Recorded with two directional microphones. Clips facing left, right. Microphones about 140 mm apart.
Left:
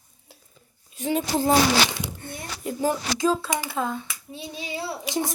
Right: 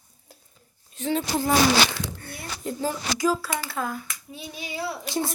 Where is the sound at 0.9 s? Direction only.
15° left (ahead or behind).